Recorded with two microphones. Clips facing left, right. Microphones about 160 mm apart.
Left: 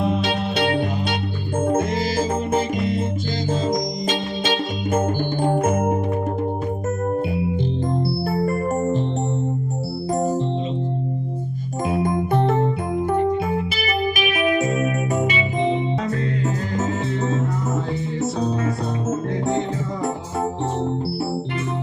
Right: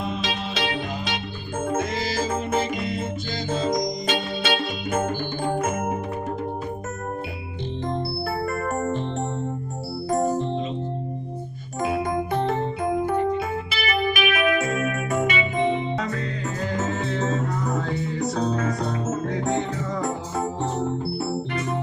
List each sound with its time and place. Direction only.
0.0 s music: 60° left (ahead or behind)
10.1 s keyboard: 35° left (ahead or behind)
11.9 s music: 25° left (ahead or behind)
12.3 s music: 50° left (ahead or behind); by 16.1 s 30° left (ahead or behind)
17.7 s music: 25° left (ahead or behind)